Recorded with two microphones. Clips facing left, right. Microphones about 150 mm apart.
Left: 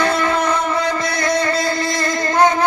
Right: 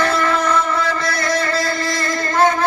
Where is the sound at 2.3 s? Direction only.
15° left (ahead or behind).